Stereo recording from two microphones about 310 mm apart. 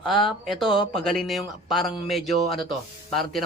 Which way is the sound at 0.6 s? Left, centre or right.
Centre.